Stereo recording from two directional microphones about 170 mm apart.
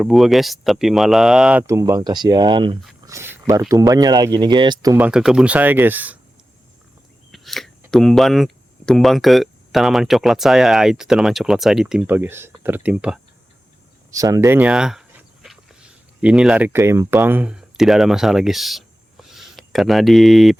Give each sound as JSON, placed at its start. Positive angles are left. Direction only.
{"t": 0.0, "sound": "speech", "side_deg": 0}
{"t": 1.6, "sound": "speech", "side_deg": -20}
{"t": 3.1, "sound": "speech", "side_deg": -15}
{"t": 4.9, "sound": "speech", "side_deg": -5}
{"t": 7.3, "sound": "a sound", "side_deg": 0}
{"t": 7.9, "sound": "speech", "side_deg": 0}
{"t": 14.1, "sound": "speech", "side_deg": -20}